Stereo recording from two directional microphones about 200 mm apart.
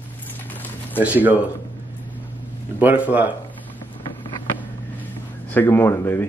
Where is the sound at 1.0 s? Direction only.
10° right (ahead or behind).